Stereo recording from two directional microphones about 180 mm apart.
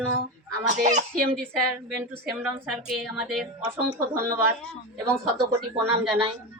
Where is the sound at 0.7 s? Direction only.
40° right (ahead or behind).